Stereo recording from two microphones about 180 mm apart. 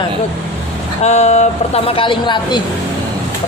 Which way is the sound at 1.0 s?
40° left (ahead or behind).